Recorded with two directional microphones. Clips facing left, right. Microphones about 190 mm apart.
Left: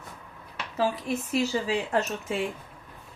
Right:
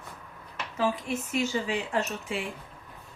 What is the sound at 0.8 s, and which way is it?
A woman's voice, 35° left (ahead or behind).